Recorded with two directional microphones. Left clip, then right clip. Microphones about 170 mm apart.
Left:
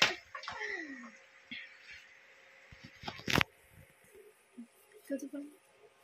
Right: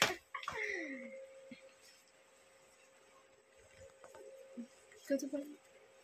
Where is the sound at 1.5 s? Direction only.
5° right (ahead or behind).